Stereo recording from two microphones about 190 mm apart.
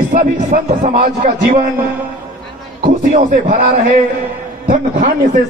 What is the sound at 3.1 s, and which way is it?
A man's voice, 45° right (ahead or behind).